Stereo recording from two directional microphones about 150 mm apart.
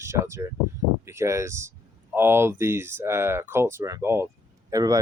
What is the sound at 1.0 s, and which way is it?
Speech, 20° right (ahead or behind).